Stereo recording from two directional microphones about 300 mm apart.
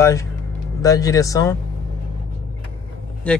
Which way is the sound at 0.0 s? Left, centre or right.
Centre.